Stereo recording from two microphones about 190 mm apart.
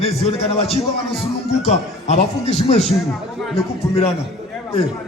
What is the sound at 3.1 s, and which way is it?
Speech, centre (ahead or behind).